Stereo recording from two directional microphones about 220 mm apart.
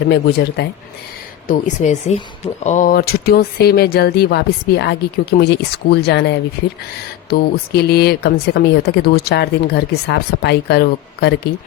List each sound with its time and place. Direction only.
0.1 s speech: 50° left (ahead or behind)
1.5 s speech: 35° left (ahead or behind)